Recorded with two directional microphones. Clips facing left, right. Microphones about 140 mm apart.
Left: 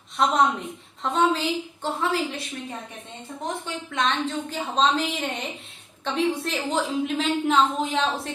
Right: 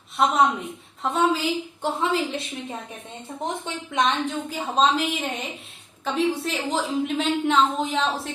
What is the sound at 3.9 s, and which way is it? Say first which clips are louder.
Speech: right 2 dB; 15° right (ahead or behind).